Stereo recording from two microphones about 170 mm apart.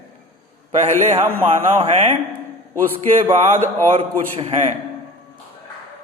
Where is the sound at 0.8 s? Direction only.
40° right (ahead or behind).